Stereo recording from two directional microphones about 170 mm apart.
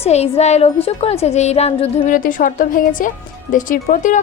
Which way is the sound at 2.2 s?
50° left (ahead or behind).